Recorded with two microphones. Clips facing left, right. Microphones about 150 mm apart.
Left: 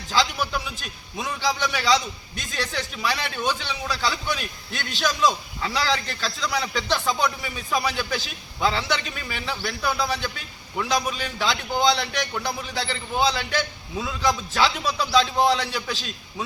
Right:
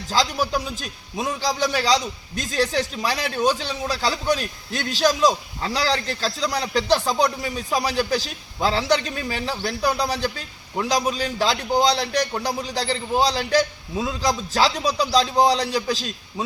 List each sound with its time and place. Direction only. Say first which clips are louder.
0.1 s a man's voice: right 2 dB; 40° right (ahead or behind)